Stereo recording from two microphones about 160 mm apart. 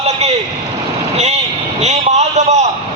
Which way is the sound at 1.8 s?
45° right (ahead or behind).